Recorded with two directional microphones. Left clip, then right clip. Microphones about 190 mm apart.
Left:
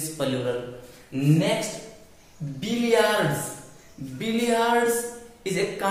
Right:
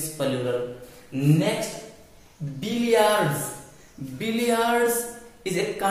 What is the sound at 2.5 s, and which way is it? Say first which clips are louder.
A man's voice: right 1 dB; 15° right (ahead or behind).